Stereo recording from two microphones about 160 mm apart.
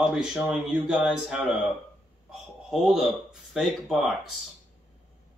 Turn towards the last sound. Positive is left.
turn(degrees=0)  # may be behind; listen again after turning